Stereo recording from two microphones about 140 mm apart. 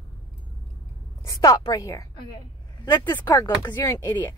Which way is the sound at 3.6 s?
15° left (ahead or behind).